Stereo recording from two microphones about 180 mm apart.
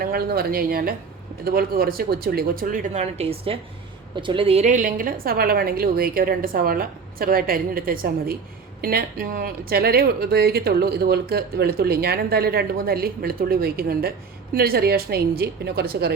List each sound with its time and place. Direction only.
0.0 s a woman's voice: 55° right (ahead or behind)